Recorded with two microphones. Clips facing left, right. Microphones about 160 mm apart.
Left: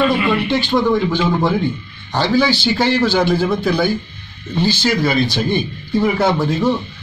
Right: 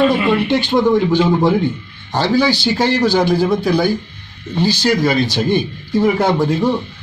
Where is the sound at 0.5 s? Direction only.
15° right (ahead or behind).